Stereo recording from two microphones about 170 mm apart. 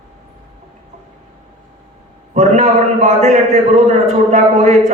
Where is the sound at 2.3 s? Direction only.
40° right (ahead or behind).